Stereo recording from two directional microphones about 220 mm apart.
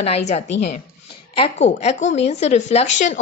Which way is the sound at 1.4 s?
30° left (ahead or behind).